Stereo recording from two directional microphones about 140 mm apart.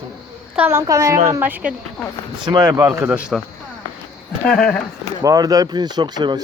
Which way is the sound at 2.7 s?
25° right (ahead or behind).